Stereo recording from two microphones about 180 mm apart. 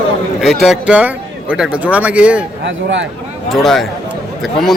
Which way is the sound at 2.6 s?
85° right.